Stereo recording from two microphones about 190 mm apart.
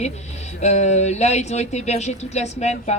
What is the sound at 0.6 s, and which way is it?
Speech, 35° left (ahead or behind).